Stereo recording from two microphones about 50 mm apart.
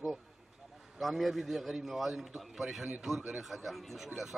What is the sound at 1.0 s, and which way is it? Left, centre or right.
A man's voice, centre.